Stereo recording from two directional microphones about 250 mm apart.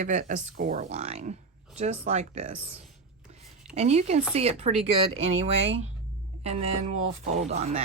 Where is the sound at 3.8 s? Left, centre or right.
Right.